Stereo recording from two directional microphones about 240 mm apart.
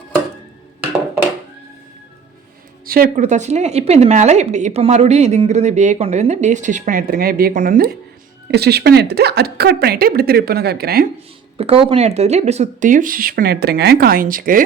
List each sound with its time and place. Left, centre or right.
2.8 s a woman's voice: right
11.5 s speech: right